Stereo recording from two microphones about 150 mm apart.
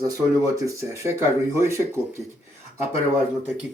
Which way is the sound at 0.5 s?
20° right (ahead or behind).